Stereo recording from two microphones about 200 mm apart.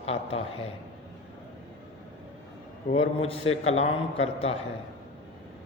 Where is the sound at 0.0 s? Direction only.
30° left (ahead or behind).